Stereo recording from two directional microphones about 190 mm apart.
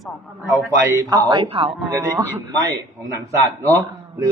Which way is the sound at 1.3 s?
25° right (ahead or behind).